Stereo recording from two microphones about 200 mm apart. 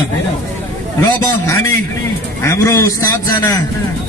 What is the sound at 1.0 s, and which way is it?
A man's voice, 15° left (ahead or behind).